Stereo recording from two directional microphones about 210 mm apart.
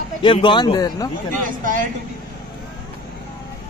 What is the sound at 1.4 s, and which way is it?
Speech, 40° right (ahead or behind).